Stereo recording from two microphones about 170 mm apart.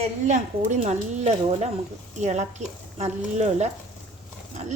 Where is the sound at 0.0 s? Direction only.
45° right (ahead or behind).